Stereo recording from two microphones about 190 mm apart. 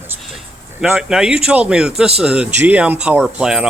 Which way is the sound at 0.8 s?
Centre (ahead or behind).